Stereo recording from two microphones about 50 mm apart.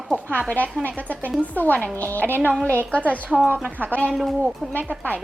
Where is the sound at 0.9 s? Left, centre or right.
Left.